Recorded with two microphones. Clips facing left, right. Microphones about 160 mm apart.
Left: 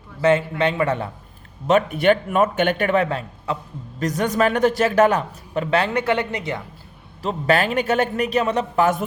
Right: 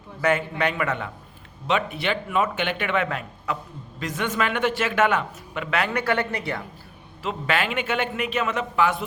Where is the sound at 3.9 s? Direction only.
40° left (ahead or behind); by 6.6 s 20° left (ahead or behind).